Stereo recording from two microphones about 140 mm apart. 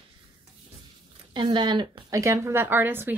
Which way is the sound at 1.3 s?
30° right (ahead or behind).